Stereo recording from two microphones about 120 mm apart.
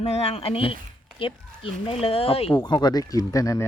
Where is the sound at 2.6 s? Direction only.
35° left (ahead or behind).